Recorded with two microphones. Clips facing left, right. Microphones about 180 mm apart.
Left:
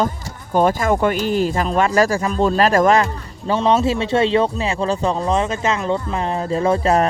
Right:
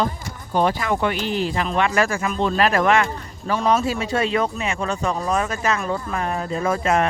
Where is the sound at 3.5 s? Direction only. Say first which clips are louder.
Left 3 dB; 25° left (ahead or behind).